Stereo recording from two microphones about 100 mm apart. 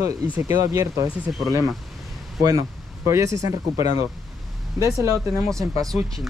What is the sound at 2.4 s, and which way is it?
Speech, 30° right (ahead or behind).